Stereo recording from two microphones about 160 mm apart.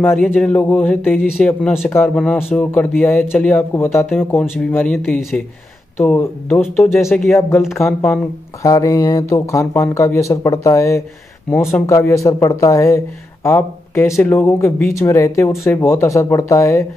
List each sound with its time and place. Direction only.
0.2 s speech: 5° left (ahead or behind)
5.9 s speech: 15° left (ahead or behind)
7.1 s speech: centre (ahead or behind)
7.3 s speech: 15° left (ahead or behind)
7.6 s speech: centre (ahead or behind)
8.6 s speech: 20° left (ahead or behind)